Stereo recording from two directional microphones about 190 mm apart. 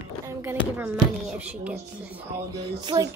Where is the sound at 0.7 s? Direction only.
10° right (ahead or behind).